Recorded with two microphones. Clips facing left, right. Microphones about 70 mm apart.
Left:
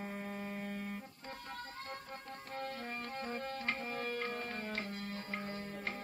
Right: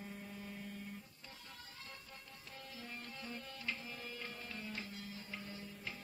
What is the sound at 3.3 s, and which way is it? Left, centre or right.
Tabla, left.